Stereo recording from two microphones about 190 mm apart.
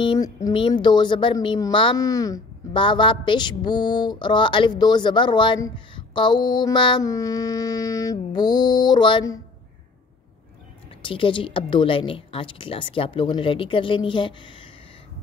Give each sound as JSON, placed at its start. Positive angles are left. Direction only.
{"t": 0.0, "sound": "a woman's voice", "side_deg": 20}
{"t": 11.0, "sound": "a woman's voice", "side_deg": 25}